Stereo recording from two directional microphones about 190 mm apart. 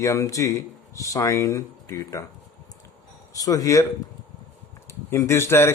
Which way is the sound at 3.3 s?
20° left (ahead or behind).